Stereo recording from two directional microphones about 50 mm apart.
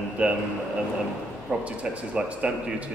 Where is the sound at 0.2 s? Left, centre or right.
Right.